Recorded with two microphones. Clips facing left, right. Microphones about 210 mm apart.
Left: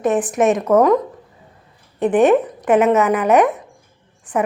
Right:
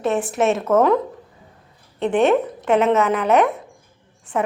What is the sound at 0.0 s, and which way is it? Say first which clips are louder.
Speech: left 3 dB; 15° left (ahead or behind).